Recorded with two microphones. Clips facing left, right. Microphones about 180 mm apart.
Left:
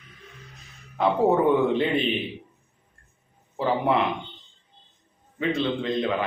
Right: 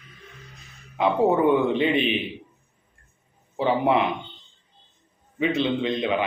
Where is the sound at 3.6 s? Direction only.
5° right (ahead or behind).